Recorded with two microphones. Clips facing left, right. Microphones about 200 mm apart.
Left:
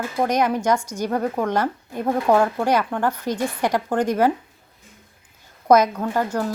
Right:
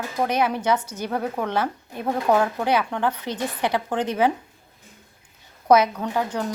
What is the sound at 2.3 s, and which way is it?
Speech, centre (ahead or behind).